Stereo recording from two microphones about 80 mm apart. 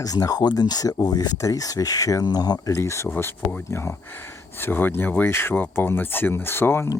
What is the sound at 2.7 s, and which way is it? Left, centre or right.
Speech, left.